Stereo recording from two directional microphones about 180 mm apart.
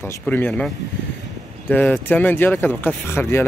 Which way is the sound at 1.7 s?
10° left (ahead or behind).